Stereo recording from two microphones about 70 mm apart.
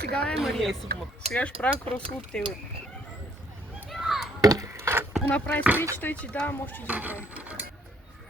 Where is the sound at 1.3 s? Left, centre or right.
Centre.